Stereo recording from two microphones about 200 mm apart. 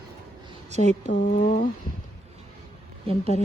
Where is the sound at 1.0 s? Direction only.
40° left (ahead or behind).